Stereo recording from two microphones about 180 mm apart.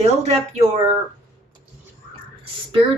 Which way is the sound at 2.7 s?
30° right (ahead or behind).